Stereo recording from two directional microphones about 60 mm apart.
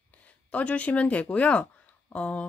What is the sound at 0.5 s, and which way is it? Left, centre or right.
Speech, left.